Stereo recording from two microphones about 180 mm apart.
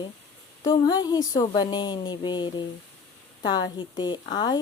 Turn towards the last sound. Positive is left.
turn(degrees=25)  # may be behind; listen again after turning